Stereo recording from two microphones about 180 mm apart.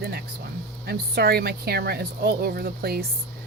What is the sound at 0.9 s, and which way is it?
Speech, 60° right (ahead or behind).